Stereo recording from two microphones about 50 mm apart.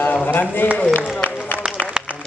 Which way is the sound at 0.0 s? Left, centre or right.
Left.